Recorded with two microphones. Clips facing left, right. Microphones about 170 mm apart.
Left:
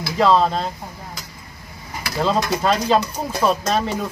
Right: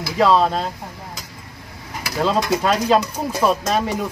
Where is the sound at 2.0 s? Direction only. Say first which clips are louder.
Right 1 dB; 5° right (ahead or behind).